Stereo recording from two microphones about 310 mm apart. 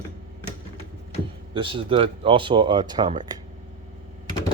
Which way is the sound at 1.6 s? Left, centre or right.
Centre.